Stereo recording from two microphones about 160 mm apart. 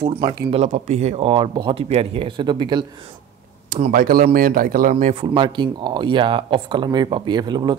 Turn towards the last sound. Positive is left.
turn(degrees=-25)  # may be behind; listen again after turning